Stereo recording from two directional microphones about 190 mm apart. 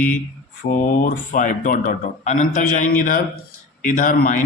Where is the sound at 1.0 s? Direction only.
40° left (ahead or behind).